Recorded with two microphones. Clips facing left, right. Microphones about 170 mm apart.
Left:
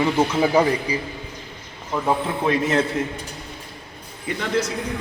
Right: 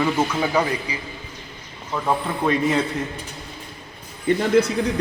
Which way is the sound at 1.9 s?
10° left (ahead or behind).